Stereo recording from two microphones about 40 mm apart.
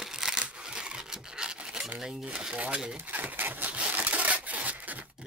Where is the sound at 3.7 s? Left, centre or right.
Right.